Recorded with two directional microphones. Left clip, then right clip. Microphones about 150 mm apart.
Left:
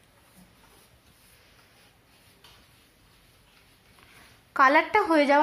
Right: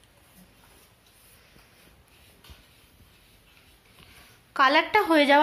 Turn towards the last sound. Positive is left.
turn(degrees=0)  # may be behind; listen again after turning